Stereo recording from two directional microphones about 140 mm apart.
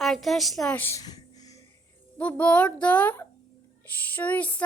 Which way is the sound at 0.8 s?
15° left (ahead or behind).